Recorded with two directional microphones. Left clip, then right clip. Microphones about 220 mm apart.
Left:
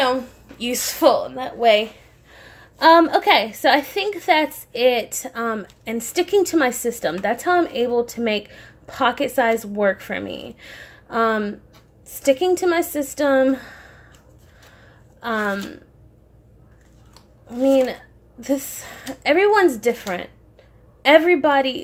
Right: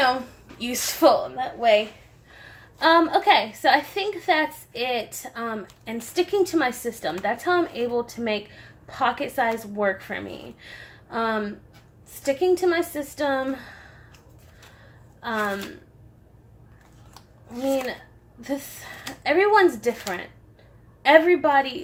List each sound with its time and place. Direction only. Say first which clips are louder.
0.6 s a woman's voice: left 2 dB; 35° left (ahead or behind)
15.2 s a woman's voice: left 3 dB; 45° left (ahead or behind)
18.3 s a woman's voice: left 7 dB; 45° left (ahead or behind)